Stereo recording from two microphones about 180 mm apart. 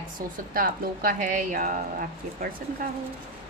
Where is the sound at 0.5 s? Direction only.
50° right (ahead or behind).